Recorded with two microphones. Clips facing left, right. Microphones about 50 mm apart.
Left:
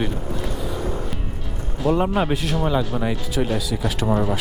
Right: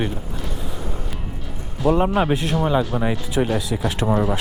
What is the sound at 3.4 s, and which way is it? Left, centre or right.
Speech, centre.